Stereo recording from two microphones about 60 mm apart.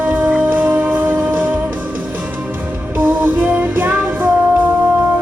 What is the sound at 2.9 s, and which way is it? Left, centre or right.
Music, right.